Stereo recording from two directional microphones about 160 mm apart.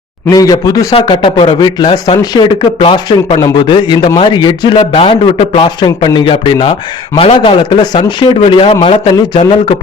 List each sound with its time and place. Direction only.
0.3 s a man's voice: 20° left (ahead or behind)